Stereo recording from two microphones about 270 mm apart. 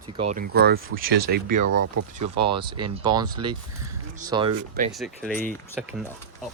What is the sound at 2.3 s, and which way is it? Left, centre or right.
Speech, centre.